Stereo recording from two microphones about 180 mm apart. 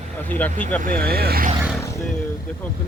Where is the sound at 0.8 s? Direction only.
55° right (ahead or behind).